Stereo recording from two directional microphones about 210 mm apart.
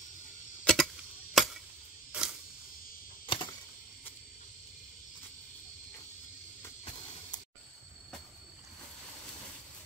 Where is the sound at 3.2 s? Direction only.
25° left (ahead or behind).